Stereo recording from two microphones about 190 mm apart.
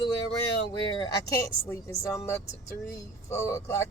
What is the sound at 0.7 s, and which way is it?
A woman's voice, 25° left (ahead or behind).